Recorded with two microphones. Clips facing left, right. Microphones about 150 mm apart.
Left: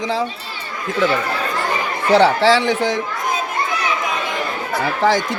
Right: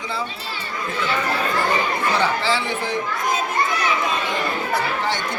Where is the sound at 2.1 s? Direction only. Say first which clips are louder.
Left 11 dB; 85° left.